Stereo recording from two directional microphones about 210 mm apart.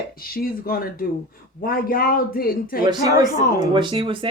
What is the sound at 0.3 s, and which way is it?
A man's voice, 45° left (ahead or behind).